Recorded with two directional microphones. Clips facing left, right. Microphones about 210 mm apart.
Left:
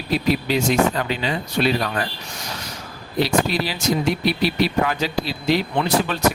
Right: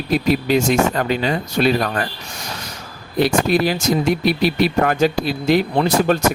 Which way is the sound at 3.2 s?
50° right (ahead or behind).